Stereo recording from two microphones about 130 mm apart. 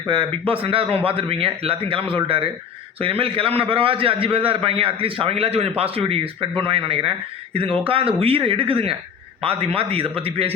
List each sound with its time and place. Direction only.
0.1 s a man's voice: 40° right (ahead or behind)